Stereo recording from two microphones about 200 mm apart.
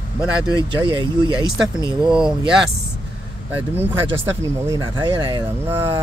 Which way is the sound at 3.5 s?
10° right (ahead or behind).